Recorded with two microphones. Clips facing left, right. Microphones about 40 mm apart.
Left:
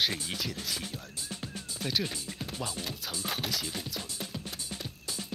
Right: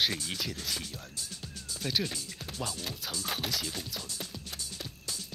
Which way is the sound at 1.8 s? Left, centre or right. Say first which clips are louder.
Even; centre.